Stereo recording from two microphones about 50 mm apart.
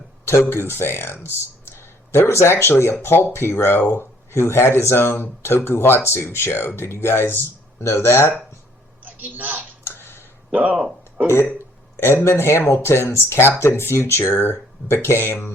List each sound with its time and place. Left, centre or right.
0.3 s speech: left
9.0 s speech: right
9.8 s a sound: left
10.5 s speech: right
12.0 s speech: left